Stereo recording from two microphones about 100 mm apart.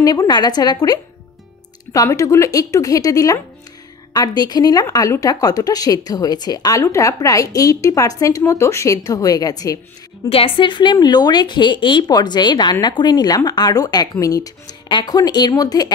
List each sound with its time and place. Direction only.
0.0 s speech: 40° left (ahead or behind)
10.3 s a woman's voice: 60° left (ahead or behind); by 15.9 s 40° left (ahead or behind)